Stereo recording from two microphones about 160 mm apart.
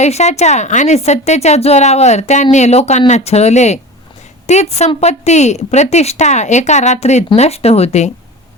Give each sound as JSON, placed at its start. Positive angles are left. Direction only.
{"t": 0.0, "sound": "a woman's voice", "side_deg": 45}